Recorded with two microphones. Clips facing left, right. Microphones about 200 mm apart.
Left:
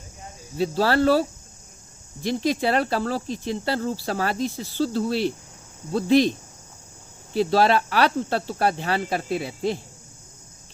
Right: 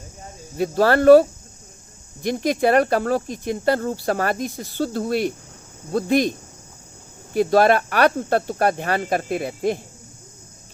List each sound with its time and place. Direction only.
0.5 s speech: 50° right (ahead or behind)
7.3 s speech: 50° right (ahead or behind)